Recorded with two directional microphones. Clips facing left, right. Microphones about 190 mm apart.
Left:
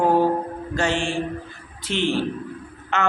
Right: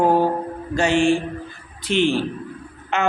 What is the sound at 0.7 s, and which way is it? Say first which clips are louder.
A man's voice: right 6 dB; 15° right (ahead or behind).